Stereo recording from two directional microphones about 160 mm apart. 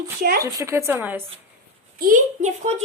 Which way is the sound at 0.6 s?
15° right (ahead or behind).